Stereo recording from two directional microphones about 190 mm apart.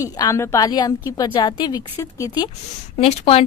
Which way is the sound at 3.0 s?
35° left (ahead or behind).